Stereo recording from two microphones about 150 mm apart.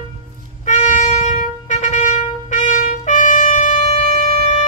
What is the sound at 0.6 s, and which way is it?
Wind instrument, 55° left (ahead or behind).